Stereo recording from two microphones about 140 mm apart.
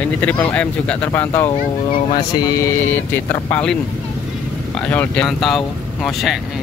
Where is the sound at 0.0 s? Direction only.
10° left (ahead or behind).